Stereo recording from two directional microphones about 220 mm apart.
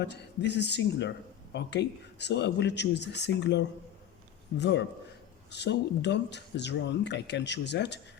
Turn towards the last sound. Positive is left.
turn(degrees=50)  # may be behind; listen again after turning